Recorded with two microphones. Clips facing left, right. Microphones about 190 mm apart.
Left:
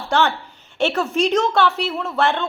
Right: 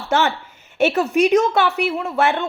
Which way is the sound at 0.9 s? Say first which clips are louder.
Right 4 dB; 20° right (ahead or behind).